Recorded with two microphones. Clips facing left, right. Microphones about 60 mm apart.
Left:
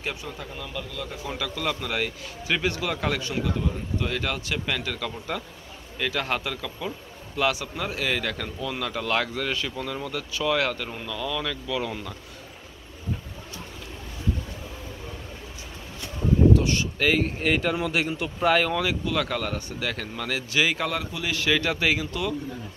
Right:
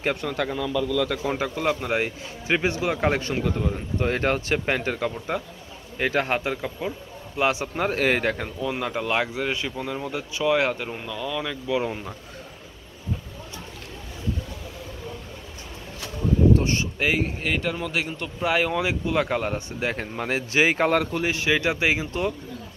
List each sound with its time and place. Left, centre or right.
0.0 s speech: right
1.2 s a man's voice: right
16.5 s speech: right
17.0 s speech: centre
17.4 s speech: centre
18.5 s a man's voice: centre; by 22.3 s right